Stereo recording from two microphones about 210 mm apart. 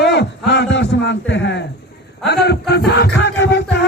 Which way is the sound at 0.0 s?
55° left (ahead or behind).